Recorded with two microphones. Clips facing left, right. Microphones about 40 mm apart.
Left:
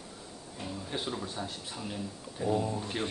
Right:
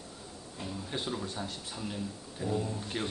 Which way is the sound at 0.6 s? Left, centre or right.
Centre.